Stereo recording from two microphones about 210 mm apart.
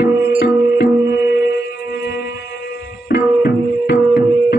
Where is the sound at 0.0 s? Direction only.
50° left (ahead or behind).